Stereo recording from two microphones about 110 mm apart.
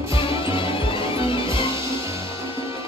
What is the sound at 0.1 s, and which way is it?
Music, 55° left (ahead or behind).